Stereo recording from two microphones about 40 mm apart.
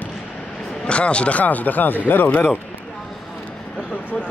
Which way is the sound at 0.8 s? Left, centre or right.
Left.